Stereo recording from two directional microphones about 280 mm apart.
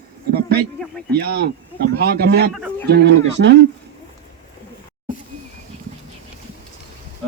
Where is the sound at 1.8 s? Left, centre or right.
Right.